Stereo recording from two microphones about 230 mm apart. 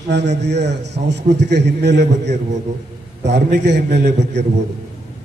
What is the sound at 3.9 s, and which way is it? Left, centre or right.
Speech, right.